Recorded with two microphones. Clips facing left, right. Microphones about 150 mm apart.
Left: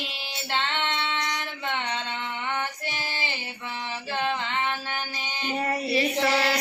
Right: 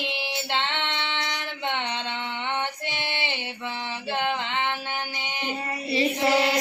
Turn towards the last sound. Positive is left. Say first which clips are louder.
# right 2 dB
turn(degrees=-25)  # may be behind; listen again after turning